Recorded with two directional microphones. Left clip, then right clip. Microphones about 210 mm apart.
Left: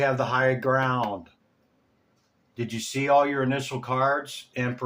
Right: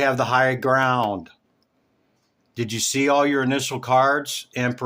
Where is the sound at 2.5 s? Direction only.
55° right (ahead or behind).